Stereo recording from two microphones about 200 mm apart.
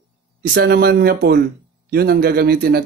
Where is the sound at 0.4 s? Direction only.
45° right (ahead or behind).